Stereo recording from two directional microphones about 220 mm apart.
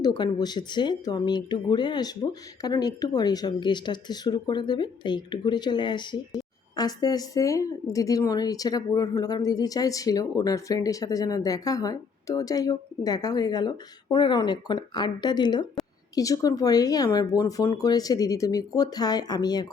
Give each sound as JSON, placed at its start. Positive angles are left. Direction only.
{"t": 0.0, "sound": "speech", "side_deg": 20}